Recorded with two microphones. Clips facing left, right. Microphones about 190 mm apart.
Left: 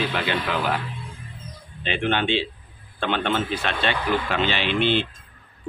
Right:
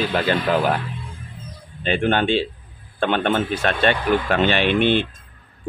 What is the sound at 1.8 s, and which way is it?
A man's voice, 45° right (ahead or behind).